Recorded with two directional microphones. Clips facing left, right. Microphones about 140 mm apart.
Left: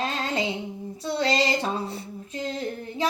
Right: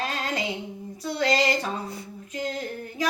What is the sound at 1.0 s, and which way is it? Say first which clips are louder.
Female singing: even; 30° left (ahead or behind).